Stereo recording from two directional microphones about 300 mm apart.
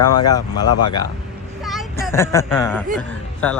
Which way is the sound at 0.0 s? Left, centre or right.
Left.